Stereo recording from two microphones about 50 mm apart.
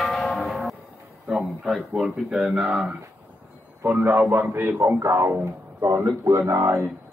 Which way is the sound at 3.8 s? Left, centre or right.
Right.